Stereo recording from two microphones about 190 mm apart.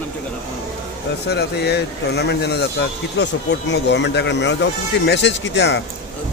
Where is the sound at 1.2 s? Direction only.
60° left (ahead or behind).